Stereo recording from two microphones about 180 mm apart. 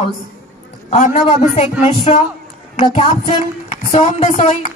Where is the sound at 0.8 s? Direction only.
40° left (ahead or behind).